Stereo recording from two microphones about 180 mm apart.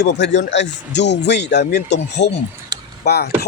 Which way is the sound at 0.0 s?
75° left (ahead or behind).